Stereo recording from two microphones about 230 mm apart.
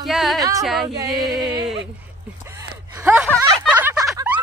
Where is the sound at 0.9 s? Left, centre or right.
Centre.